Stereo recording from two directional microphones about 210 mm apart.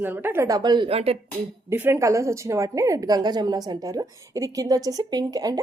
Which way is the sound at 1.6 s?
10° right (ahead or behind).